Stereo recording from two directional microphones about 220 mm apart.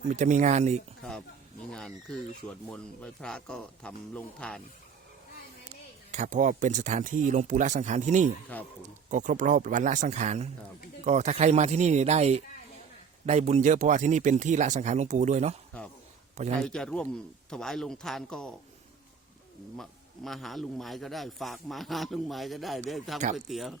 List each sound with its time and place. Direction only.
0.1 s speech: 35° right (ahead or behind)
1.7 s a man's voice: 5° left (ahead or behind)
6.1 s speech: 35° right (ahead or behind)
16.6 s a man's voice: 5° left (ahead or behind)
19.7 s a man's voice: centre (ahead or behind)